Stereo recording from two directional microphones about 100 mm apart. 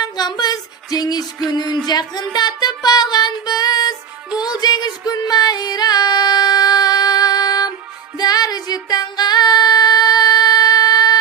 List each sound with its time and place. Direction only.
0.0 s music: 45° left (ahead or behind)